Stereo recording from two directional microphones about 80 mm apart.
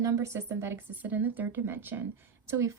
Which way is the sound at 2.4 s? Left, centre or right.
Right.